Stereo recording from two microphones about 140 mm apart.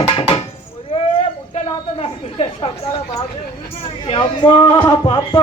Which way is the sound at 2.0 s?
45° left (ahead or behind).